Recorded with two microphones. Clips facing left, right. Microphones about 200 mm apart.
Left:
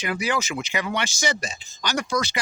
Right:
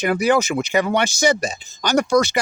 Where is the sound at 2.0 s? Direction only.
65° right (ahead or behind).